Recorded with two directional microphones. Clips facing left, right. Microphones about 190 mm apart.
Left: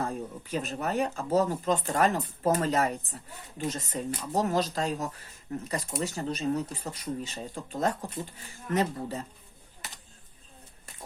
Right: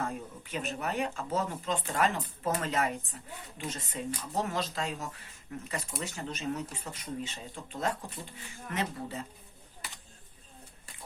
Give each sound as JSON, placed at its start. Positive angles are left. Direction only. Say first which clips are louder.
{"t": 0.0, "sound": "speech", "louder": "left 3 dB", "side_deg": 35}